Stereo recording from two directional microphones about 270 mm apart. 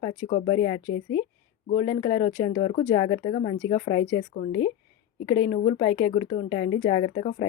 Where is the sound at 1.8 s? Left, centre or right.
Centre.